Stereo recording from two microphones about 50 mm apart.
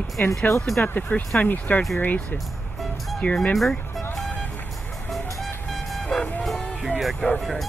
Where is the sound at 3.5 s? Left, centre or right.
Centre.